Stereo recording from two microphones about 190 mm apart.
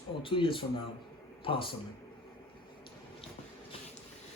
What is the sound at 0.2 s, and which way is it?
Speech, 25° left (ahead or behind).